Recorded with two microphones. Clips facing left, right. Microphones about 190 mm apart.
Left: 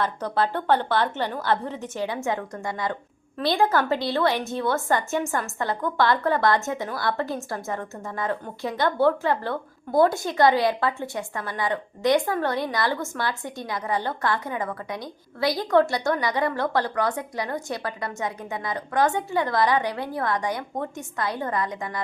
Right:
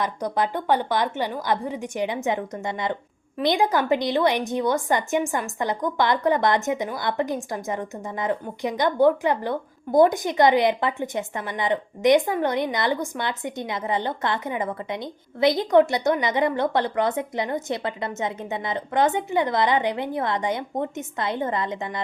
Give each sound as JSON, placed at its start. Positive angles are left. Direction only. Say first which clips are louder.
{"t": 0.0, "sound": "a woman's voice", "louder": "even", "side_deg": -15}